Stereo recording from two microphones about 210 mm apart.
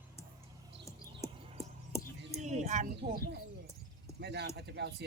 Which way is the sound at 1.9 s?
15° left (ahead or behind).